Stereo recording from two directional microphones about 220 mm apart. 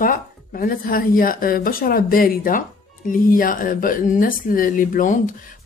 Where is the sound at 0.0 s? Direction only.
40° left (ahead or behind).